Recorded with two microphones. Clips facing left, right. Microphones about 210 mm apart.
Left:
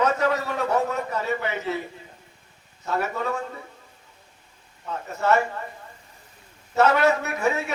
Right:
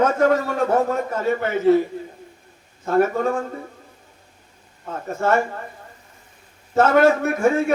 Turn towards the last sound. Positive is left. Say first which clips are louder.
# right 7 dB
turn(degrees=-50)  # may be behind; listen again after turning